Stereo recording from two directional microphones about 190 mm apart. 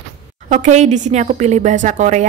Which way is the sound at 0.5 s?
40° right (ahead or behind).